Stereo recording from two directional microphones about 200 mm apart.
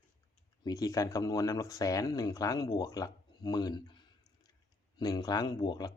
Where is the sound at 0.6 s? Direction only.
15° left (ahead or behind).